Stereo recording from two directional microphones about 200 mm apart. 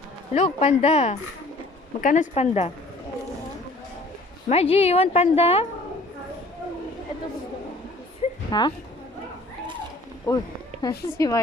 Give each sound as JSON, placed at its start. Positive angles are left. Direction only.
{"t": 0.3, "sound": "a woman's voice", "side_deg": 30}
{"t": 4.4, "sound": "a woman's voice", "side_deg": 30}
{"t": 8.4, "sound": "speech", "side_deg": 20}
{"t": 10.2, "sound": "speech", "side_deg": 20}